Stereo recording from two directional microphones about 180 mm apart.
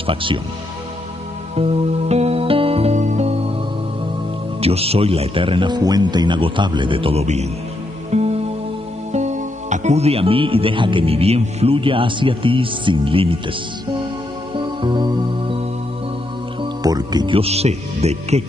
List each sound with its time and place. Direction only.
0.0 s speech: 30° right (ahead or behind)
1.6 s music: 35° right (ahead or behind)
4.6 s speech: 35° right (ahead or behind)
8.1 s music: 35° right (ahead or behind)
9.1 s speech: 40° right (ahead or behind)
14.5 s music: 25° right (ahead or behind)
16.8 s speech: 20° right (ahead or behind)